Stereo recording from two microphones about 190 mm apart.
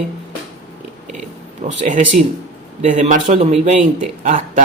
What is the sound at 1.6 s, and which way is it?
Speech, 40° right (ahead or behind).